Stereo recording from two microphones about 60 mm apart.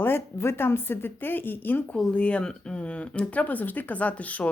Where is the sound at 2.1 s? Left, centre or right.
Left.